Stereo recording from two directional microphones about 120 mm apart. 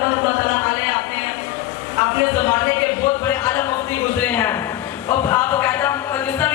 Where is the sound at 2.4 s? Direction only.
20° left (ahead or behind).